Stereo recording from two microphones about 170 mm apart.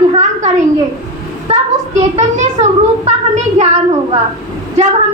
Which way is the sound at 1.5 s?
40° right (ahead or behind).